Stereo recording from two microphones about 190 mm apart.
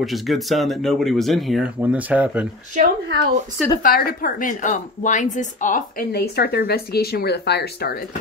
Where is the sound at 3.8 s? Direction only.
50° left (ahead or behind).